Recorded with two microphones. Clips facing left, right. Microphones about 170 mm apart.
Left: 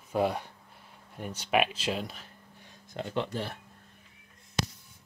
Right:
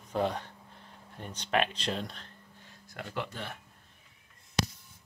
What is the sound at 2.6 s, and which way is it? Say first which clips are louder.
Speech: left 6 dB; 25° left (ahead or behind).